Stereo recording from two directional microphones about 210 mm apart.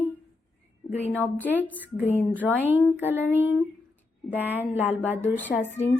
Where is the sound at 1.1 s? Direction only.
10° left (ahead or behind).